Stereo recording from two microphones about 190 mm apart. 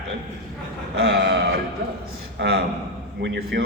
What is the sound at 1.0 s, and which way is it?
A man's voice, 60° right (ahead or behind).